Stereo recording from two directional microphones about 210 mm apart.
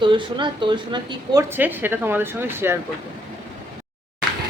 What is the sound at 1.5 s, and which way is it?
A woman's voice, 10° right (ahead or behind).